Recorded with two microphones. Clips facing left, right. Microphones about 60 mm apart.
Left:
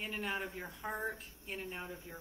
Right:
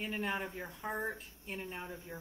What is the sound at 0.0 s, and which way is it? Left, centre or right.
A man's voice, centre.